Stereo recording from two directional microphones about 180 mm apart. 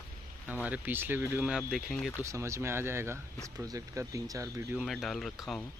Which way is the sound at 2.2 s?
15° right (ahead or behind).